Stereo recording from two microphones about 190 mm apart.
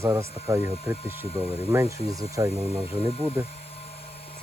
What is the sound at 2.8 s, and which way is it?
Speech, 30° left (ahead or behind).